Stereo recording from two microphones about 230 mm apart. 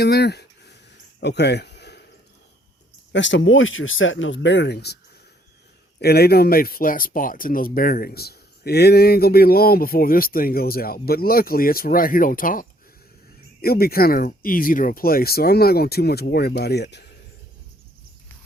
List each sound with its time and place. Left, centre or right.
0.0 s a sound: left
3.1 s speech: left
6.0 s speech: left